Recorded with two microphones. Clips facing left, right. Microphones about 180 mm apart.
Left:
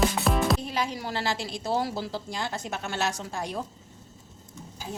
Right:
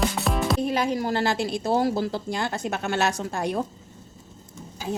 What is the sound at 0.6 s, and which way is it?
A woman's voice, 55° right (ahead or behind).